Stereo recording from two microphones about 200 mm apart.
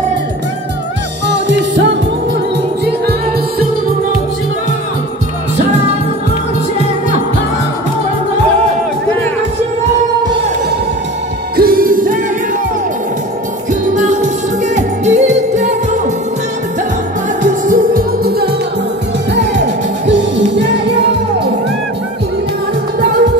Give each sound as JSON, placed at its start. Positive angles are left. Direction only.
{"t": 1.2, "sound": "music", "side_deg": -60}
{"t": 2.8, "sound": "music", "side_deg": -50}
{"t": 11.5, "sound": "music", "side_deg": -50}
{"t": 13.9, "sound": "music", "side_deg": -35}
{"t": 17.4, "sound": "music", "side_deg": -45}
{"t": 20.1, "sound": "music", "side_deg": -60}